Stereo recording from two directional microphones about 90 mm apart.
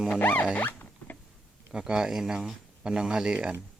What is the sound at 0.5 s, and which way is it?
Zipper, 20° left (ahead or behind).